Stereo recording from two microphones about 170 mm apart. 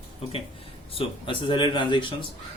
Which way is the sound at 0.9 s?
30° left (ahead or behind).